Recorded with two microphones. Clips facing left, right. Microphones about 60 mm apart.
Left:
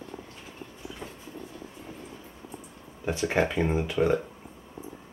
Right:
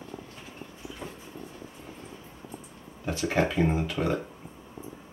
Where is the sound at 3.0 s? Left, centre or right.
Centre.